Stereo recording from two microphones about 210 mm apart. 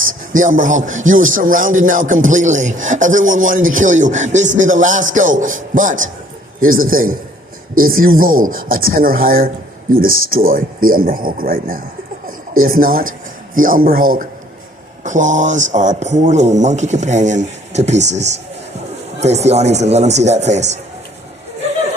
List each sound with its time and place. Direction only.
0.1 s a man's voice: 40° right (ahead or behind)
9.9 s speech: 75° right (ahead or behind)
10.2 s a man's voice: 40° right (ahead or behind)